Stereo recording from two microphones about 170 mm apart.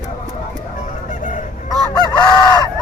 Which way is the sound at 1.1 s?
50° left (ahead or behind).